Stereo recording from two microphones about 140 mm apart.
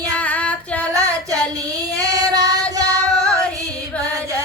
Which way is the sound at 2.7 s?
25° right (ahead or behind).